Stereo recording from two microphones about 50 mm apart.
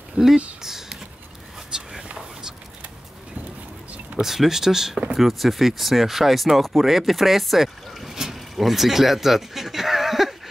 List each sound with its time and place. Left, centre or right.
0.2 s speech: right
0.6 s speech: centre
1.7 s whispering: centre
4.2 s speech: centre